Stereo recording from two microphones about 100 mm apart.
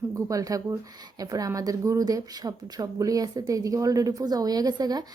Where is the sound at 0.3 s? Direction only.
35° right (ahead or behind).